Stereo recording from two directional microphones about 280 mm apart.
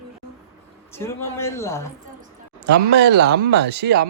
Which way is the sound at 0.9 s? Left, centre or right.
Centre.